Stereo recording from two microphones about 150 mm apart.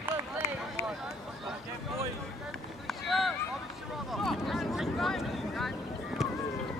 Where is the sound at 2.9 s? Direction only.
Centre (ahead or behind).